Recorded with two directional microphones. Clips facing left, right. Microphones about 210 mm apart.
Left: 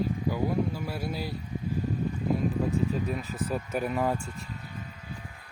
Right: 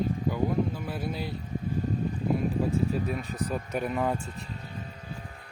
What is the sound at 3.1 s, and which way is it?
Speech, 5° left (ahead or behind).